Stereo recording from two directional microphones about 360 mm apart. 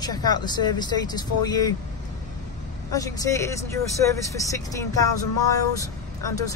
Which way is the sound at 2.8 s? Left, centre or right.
Centre.